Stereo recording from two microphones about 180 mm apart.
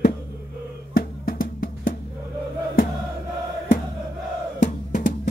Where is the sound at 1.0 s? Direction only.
50° left (ahead or behind).